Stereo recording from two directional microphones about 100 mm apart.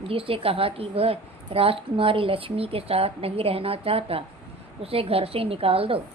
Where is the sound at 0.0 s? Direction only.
70° right (ahead or behind).